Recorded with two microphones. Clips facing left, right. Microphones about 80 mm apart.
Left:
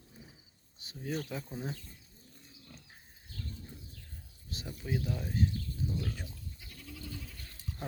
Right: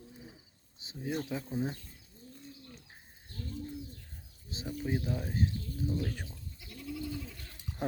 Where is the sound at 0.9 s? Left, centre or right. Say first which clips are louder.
Right 2 dB; centre.